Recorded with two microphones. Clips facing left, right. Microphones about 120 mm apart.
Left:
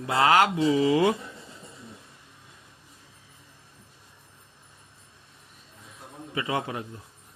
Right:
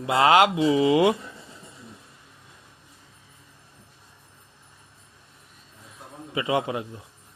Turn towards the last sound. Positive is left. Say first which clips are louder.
# right 4 dB
turn(degrees=-15)  # may be behind; listen again after turning